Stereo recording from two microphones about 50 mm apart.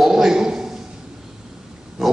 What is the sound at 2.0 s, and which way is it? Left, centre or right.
Speech, centre.